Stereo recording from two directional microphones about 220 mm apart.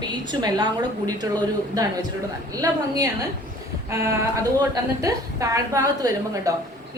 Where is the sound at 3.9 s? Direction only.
15° right (ahead or behind).